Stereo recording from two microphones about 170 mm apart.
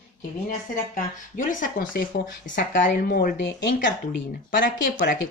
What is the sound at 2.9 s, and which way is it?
Speech, 70° left (ahead or behind).